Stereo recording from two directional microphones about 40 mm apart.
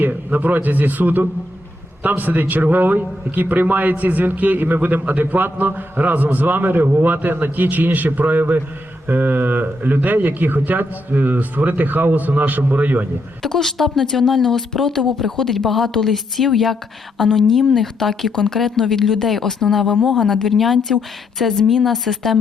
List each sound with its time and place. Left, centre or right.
0.0 s a man's voice: right
6.8 s a man's voice: right
13.4 s speech: centre